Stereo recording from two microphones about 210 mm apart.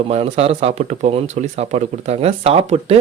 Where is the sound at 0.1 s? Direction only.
30° right (ahead or behind).